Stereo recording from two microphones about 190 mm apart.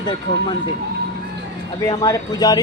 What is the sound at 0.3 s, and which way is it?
Speech, 25° left (ahead or behind).